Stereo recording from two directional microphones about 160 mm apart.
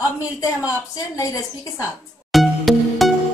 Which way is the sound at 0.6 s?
20° left (ahead or behind).